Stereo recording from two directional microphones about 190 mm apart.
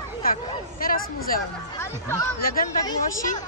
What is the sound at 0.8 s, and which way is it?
Speech, 50° left (ahead or behind).